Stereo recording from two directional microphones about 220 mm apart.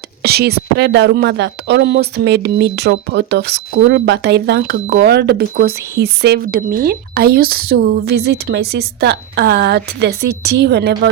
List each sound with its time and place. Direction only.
0.2 s speech: 45° right (ahead or behind)